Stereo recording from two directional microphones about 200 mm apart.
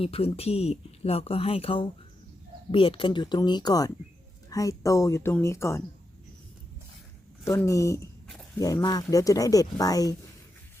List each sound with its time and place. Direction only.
0.0 s speech: 30° left (ahead or behind); by 5.8 s 15° left (ahead or behind)
7.4 s speech: 15° left (ahead or behind)